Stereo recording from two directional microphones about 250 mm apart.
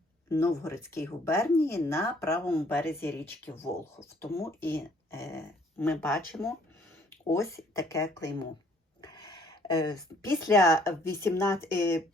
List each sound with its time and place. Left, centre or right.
0.3 s speech: centre
9.0 s a sound: centre
10.4 s speech: centre